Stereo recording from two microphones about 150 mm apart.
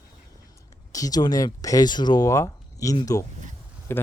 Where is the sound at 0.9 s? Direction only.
25° left (ahead or behind).